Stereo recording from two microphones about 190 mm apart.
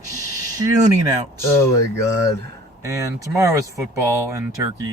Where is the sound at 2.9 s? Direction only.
15° right (ahead or behind).